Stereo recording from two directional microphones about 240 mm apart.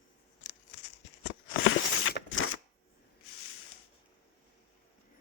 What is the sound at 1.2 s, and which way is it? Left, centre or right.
Shuffling cards, left.